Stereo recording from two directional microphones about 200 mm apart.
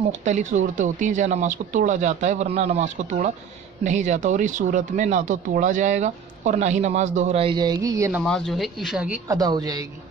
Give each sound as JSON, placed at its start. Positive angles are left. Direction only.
{"t": 0.2, "sound": "speech", "side_deg": -35}
{"t": 8.2, "sound": "speech", "side_deg": 0}
{"t": 9.3, "sound": "speech", "side_deg": -20}